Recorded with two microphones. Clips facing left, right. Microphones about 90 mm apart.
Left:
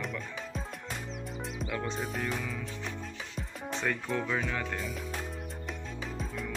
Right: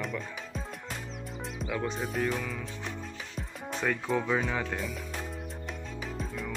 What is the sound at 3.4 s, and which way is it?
Music, centre (ahead or behind).